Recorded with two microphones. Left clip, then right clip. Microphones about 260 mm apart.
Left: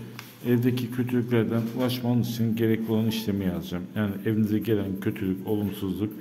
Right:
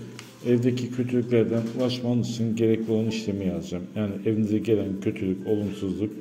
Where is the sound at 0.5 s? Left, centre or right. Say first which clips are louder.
Right 2 dB; centre.